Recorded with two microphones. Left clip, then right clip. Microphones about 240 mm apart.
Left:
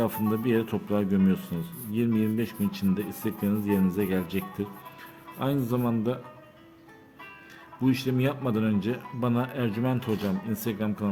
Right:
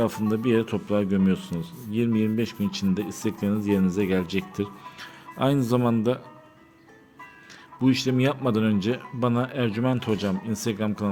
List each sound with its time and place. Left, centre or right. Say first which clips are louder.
0.0 s speech: right 3 dB; centre
7.9 s speech: right 4 dB; centre